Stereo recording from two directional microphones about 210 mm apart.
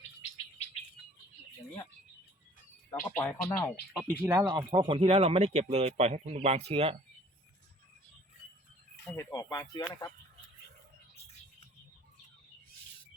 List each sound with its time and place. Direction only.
2.9 s speech: 40° left (ahead or behind)
3.2 s speech: 10° left (ahead or behind)
4.2 s speech: 15° right (ahead or behind)
9.0 s speech: 15° left (ahead or behind)